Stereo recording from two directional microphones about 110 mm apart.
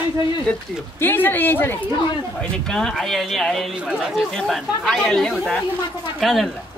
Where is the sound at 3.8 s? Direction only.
10° right (ahead or behind).